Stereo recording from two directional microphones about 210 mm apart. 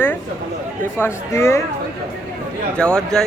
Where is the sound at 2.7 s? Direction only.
5° left (ahead or behind).